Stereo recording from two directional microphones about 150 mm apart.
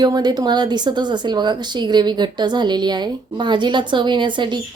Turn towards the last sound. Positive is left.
turn(degrees=-30)  # may be behind; listen again after turning